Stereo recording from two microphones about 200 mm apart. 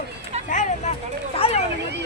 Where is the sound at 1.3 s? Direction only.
30° left (ahead or behind).